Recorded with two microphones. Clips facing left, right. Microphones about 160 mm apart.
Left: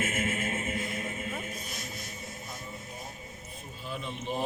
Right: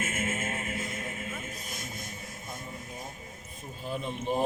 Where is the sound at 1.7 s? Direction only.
50° right (ahead or behind).